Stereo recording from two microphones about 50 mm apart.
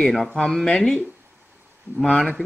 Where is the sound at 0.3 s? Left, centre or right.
Centre.